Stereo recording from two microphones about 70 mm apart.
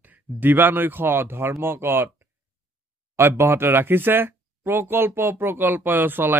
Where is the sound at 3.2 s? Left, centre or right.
Right.